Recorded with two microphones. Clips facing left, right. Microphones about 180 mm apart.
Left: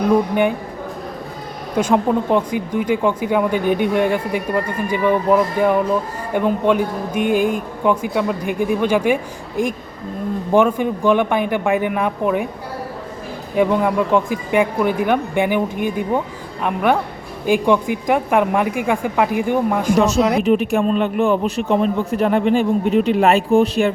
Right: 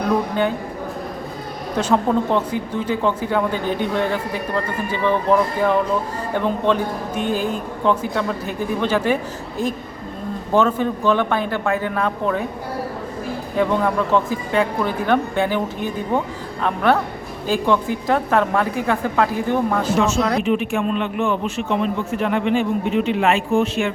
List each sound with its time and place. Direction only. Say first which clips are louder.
1.7 s speech: left 2 dB; 10° left (ahead or behind)
10.5 s speech: left 2 dB; 15° left (ahead or behind)
13.6 s speech: left 3 dB; 15° left (ahead or behind)
20.4 s speech: left 4 dB; 40° left (ahead or behind)